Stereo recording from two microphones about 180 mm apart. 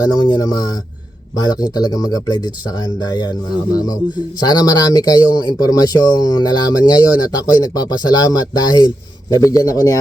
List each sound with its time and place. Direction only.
0.0 s speech: 20° left (ahead or behind)
4.4 s speech: 20° left (ahead or behind)